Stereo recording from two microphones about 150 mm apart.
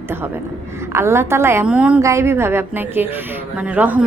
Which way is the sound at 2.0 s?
20° right (ahead or behind).